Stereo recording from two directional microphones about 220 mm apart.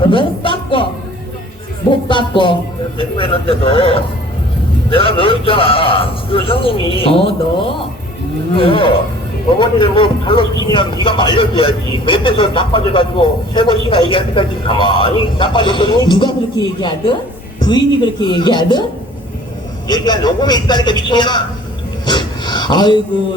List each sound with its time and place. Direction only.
0.1 s speech: 20° left (ahead or behind)
2.0 s speech: 20° left (ahead or behind)
8.5 s speech: 25° left (ahead or behind)
19.9 s speech: 20° left (ahead or behind)